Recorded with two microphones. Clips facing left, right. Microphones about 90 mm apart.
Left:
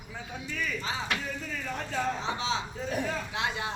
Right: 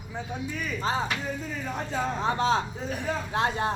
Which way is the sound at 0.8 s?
40° right (ahead or behind).